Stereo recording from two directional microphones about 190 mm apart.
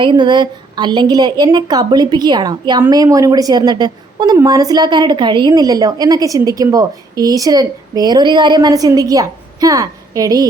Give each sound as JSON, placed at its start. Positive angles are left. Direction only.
{"t": 0.0, "sound": "a woman's voice", "side_deg": -25}